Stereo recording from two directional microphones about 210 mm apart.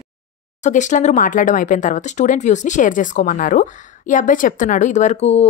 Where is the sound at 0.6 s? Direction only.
35° left (ahead or behind).